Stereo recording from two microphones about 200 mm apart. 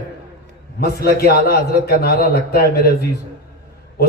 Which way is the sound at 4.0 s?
50° left (ahead or behind).